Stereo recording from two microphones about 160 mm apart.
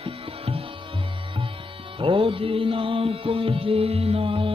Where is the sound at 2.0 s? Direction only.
35° right (ahead or behind).